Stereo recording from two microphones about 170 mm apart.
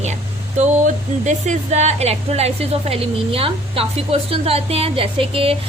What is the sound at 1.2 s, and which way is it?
A woman's voice, 45° right (ahead or behind).